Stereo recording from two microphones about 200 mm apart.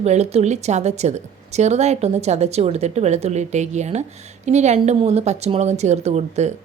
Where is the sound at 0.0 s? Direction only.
35° right (ahead or behind).